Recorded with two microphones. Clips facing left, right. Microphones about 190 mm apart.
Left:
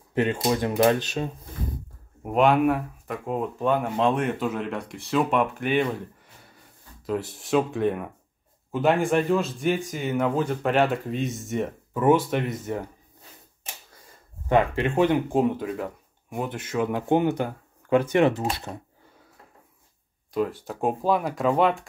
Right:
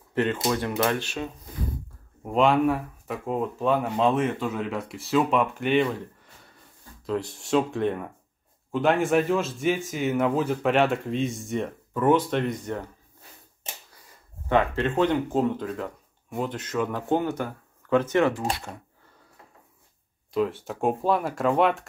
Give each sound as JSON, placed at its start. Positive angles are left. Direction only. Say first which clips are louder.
{"t": 0.1, "sound": "speech", "louder": "left 1 dB", "side_deg": 15}
{"t": 0.5, "sound": "speech", "louder": "left 4 dB", "side_deg": 25}
{"t": 2.2, "sound": "speech", "louder": "left 1 dB", "side_deg": 5}
{"t": 7.1, "sound": "speech", "louder": "even", "side_deg": 5}
{"t": 14.5, "sound": "speech", "louder": "left 1 dB", "side_deg": 10}
{"t": 20.3, "sound": "speech", "louder": "right 1 dB", "side_deg": 0}